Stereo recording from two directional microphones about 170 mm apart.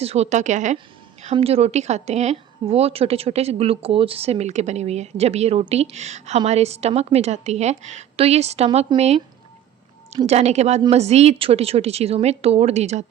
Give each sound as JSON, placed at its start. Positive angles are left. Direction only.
{"t": 0.0, "sound": "a woman's voice", "side_deg": -40}
{"t": 10.2, "sound": "speech", "side_deg": -40}